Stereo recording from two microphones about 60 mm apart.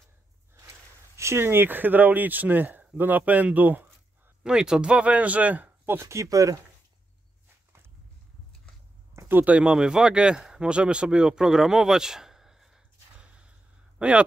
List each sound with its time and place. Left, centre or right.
1.1 s a man's voice: right
4.4 s speech: centre; by 5.9 s right
5.9 s speech: right
9.3 s speech: right; by 13.3 s centre
13.9 s speech: centre